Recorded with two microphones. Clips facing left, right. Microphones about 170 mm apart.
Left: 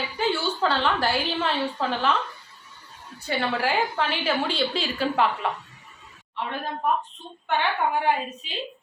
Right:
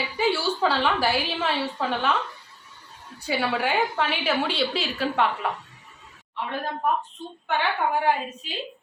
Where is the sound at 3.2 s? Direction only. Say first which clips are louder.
Even; 10° right (ahead or behind).